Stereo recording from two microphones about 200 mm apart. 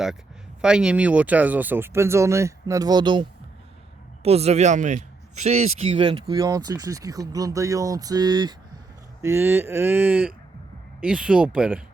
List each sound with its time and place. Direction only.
0.6 s speech: 5° right (ahead or behind)